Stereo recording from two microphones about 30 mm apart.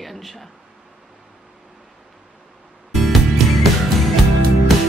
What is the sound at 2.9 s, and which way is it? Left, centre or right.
Music, centre.